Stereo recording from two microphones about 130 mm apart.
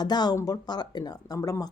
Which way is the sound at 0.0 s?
30° left (ahead or behind).